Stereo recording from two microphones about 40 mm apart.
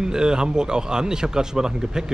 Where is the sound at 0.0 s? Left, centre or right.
Centre.